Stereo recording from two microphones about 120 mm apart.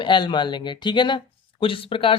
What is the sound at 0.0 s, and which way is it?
Speech, 40° left (ahead or behind).